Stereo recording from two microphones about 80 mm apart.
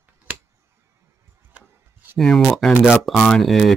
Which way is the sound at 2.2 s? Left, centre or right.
Centre.